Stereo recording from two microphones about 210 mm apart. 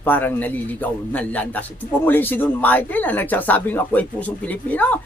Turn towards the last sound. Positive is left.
turn(degrees=10)  # may be behind; listen again after turning